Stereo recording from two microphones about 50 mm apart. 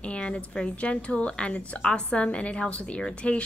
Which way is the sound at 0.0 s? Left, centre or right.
Left.